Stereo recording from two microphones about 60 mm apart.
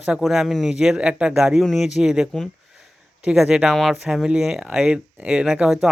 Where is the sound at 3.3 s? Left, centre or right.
Centre.